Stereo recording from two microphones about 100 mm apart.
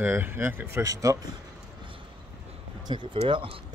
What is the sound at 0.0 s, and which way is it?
Speech, 20° right (ahead or behind).